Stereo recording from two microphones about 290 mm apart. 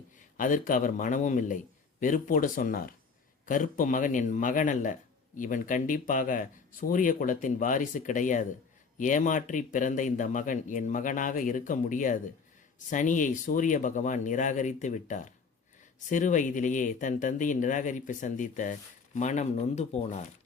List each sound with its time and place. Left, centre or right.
0.3 s speech: left